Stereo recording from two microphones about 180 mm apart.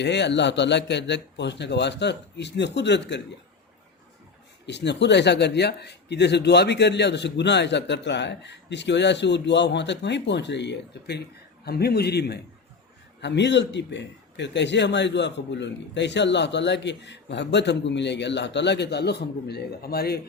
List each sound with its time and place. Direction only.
0.0 s a man's voice: 75° left (ahead or behind)
4.6 s a man's voice: 75° left (ahead or behind); by 20.1 s 60° left (ahead or behind)